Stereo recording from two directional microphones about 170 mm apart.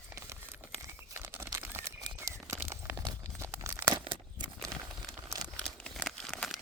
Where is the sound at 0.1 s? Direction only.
15° right (ahead or behind).